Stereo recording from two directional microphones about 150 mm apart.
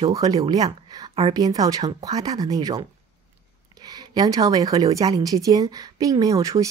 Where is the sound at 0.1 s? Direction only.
25° right (ahead or behind).